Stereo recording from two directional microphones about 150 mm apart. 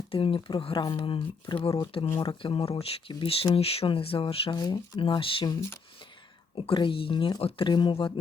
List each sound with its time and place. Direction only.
0.1 s speech: 35° left (ahead or behind)
6.6 s speech: 35° left (ahead or behind)